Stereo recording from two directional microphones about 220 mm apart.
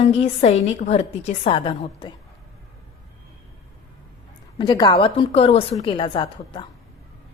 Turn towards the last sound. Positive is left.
turn(degrees=25)  # may be behind; listen again after turning